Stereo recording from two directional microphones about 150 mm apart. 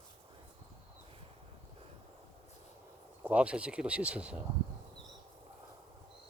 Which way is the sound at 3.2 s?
10° right (ahead or behind).